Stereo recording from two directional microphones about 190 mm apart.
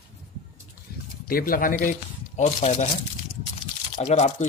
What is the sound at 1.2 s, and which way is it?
Speech, 50° left (ahead or behind).